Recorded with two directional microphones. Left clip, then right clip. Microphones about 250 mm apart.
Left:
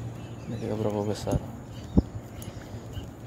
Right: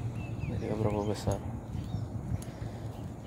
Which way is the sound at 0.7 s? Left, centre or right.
Centre.